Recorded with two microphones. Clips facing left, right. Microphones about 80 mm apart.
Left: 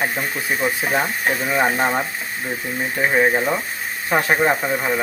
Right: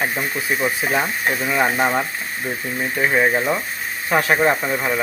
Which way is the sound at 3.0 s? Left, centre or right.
Left.